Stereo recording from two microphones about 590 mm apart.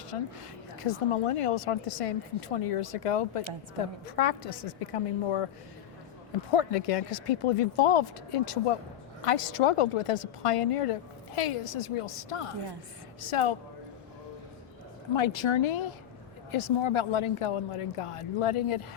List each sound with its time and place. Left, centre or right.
0.1 s speech: left
6.5 s speech: left
15.1 s speech: left